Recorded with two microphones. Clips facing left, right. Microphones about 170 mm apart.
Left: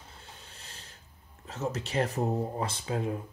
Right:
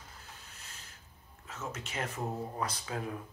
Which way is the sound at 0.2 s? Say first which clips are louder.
Left 2 dB; 30° left (ahead or behind).